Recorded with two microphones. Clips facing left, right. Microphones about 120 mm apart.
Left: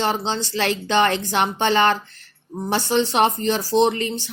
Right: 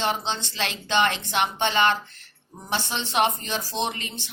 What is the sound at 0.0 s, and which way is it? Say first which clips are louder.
Speech: left 4 dB; 35° left (ahead or behind).